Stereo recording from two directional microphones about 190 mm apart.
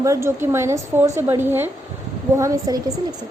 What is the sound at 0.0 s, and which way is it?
A woman's voice, 15° right (ahead or behind).